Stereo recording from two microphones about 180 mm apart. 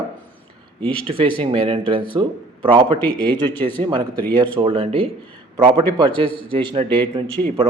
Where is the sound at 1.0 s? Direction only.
30° right (ahead or behind).